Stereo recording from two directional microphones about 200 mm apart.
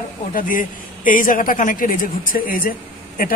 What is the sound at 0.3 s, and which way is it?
Speech, 45° left (ahead or behind).